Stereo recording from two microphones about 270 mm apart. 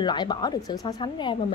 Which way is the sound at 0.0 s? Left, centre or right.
Centre.